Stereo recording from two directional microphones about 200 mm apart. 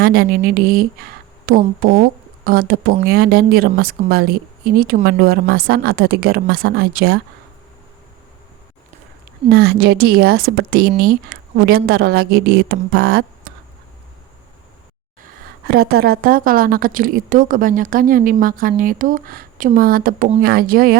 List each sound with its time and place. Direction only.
0.0 s a woman's voice: 50° right (ahead or behind)
9.5 s a woman's voice: 50° right (ahead or behind)
15.6 s a woman's voice: 50° right (ahead or behind)